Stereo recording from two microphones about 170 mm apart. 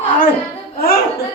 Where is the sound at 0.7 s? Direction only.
65° left (ahead or behind).